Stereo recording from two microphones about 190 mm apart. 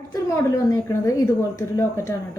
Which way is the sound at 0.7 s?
15° left (ahead or behind).